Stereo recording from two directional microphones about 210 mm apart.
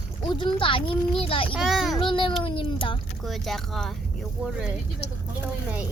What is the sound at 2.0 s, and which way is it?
Speech, 25° left (ahead or behind).